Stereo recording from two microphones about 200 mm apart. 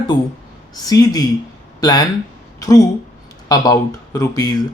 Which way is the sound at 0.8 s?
20° left (ahead or behind).